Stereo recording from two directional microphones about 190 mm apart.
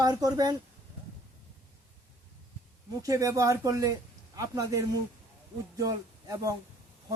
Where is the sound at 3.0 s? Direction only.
15° right (ahead or behind).